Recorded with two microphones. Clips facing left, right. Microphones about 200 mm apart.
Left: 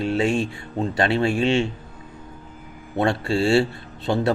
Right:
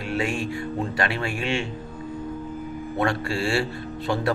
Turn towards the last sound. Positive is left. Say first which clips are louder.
# left 3 dB
turn(degrees=25)  # may be behind; listen again after turning